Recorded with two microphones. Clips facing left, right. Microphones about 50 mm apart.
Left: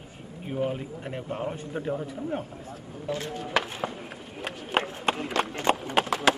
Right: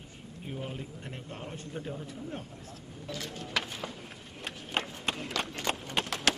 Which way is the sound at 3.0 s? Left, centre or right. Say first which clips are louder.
Left 8 dB; left.